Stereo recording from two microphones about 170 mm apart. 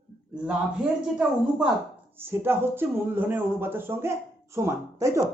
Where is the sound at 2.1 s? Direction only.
15° right (ahead or behind).